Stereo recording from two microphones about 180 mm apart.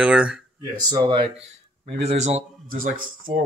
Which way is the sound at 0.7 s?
25° right (ahead or behind).